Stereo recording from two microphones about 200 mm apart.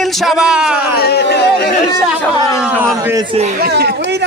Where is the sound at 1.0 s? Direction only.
55° left (ahead or behind).